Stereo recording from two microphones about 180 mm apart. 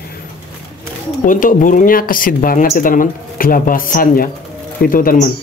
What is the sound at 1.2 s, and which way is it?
Speech, 50° left (ahead or behind).